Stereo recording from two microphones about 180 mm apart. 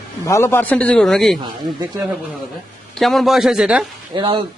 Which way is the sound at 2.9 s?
Centre (ahead or behind).